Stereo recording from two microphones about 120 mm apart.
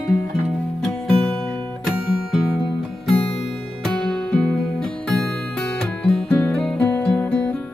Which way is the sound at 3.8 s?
5° left (ahead or behind).